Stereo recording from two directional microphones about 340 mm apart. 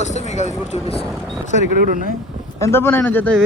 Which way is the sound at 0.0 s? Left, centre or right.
Centre.